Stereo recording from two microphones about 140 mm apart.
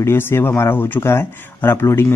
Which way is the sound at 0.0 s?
15° left (ahead or behind).